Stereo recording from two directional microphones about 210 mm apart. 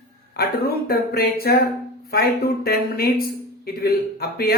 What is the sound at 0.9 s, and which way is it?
Speech, 45° left (ahead or behind).